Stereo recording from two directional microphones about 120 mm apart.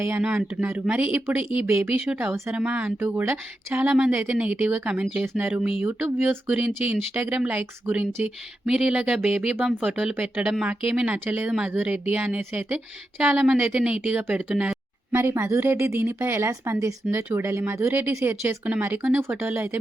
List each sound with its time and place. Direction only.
0.2 s speech: 10° right (ahead or behind)
15.1 s a woman's voice: 20° right (ahead or behind)